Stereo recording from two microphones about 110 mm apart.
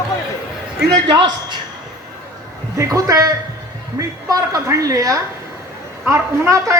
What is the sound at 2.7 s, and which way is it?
A man's voice, 30° right (ahead or behind).